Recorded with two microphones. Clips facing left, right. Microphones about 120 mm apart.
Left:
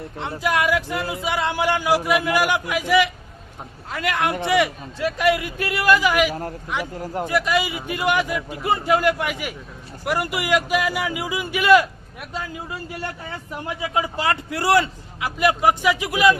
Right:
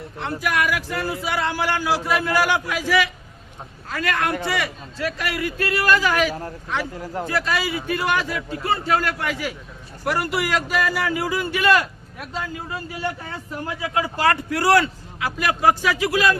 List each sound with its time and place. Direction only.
0.2 s a man's voice: 25° left (ahead or behind)
13.9 s speech: 20° left (ahead or behind)